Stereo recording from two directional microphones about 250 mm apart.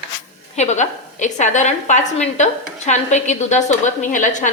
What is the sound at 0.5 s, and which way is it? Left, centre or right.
A woman's voice, left.